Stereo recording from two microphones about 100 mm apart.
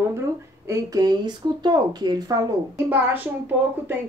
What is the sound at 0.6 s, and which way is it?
Speech, 35° right (ahead or behind).